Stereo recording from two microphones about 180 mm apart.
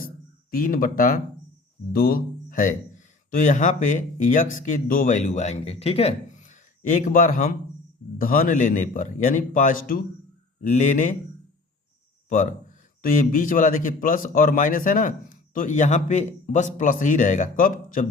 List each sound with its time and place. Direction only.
0.5 s a man's voice: 50° left (ahead or behind)
12.3 s a man's voice: 45° left (ahead or behind)